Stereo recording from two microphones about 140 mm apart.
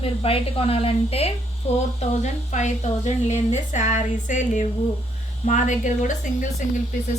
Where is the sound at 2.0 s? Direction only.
55° left (ahead or behind).